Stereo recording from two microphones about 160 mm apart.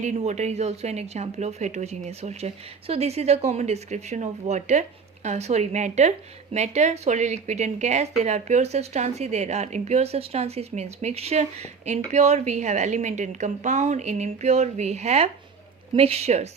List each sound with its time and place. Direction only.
0.0 s a woman's voice: 45° right (ahead or behind)